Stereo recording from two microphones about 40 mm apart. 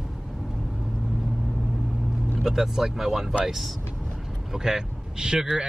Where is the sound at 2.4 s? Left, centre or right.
Centre.